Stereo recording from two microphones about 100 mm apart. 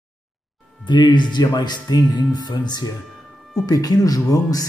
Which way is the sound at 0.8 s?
50° left (ahead or behind).